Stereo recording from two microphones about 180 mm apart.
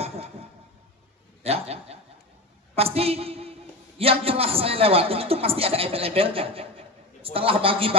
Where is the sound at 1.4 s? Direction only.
35° right (ahead or behind).